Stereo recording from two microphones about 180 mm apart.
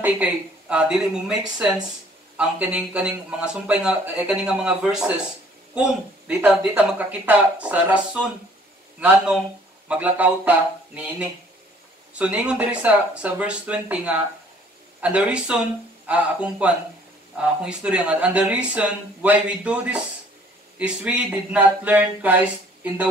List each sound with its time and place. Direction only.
0.0 s a man's voice: 5° right (ahead or behind)
9.8 s speech: 10° right (ahead or behind)
12.1 s speech: 5° right (ahead or behind)